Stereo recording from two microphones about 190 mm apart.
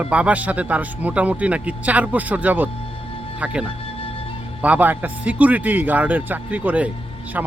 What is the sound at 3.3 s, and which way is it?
Speech, 5° right (ahead or behind).